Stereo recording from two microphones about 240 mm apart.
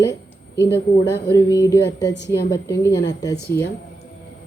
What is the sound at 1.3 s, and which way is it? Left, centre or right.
Speech, centre.